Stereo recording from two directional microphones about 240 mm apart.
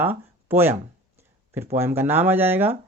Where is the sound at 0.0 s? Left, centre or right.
Centre.